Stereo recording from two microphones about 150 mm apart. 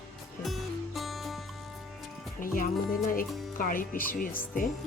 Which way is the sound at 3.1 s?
65° left (ahead or behind).